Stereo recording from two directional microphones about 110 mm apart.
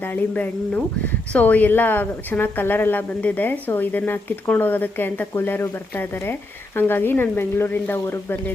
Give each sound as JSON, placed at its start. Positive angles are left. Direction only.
{"t": 0.0, "sound": "speech", "side_deg": 15}